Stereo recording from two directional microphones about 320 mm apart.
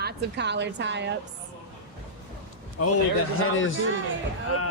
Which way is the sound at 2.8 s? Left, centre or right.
Left.